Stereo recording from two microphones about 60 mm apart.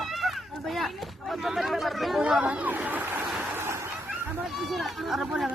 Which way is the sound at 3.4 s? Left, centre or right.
Right.